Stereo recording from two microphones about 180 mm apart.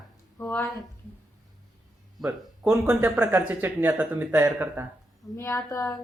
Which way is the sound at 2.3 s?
15° right (ahead or behind).